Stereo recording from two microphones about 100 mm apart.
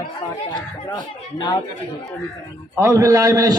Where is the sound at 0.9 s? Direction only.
45° left (ahead or behind).